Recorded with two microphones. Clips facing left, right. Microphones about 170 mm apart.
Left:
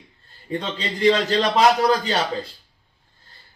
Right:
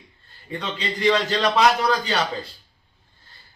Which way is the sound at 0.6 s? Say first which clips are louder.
Left 2 dB; 35° left (ahead or behind).